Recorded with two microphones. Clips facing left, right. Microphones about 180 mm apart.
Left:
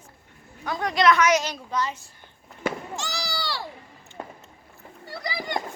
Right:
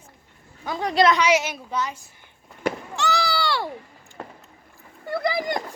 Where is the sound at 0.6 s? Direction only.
15° right (ahead or behind).